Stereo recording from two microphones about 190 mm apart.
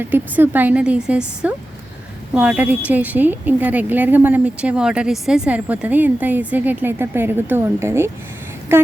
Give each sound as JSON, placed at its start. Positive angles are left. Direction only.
{"t": 0.0, "sound": "speech", "side_deg": -10}